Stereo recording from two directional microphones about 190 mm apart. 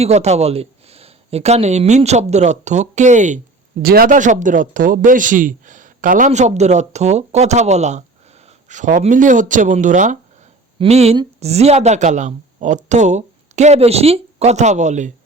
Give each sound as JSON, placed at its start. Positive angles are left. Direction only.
{"t": 0.0, "sound": "a woman's voice", "side_deg": -35}